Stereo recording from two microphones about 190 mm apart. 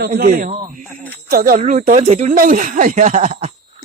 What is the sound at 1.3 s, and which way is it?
Speech, 45° right (ahead or behind).